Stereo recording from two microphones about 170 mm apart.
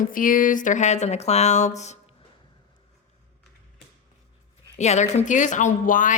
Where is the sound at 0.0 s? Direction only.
55° left (ahead or behind).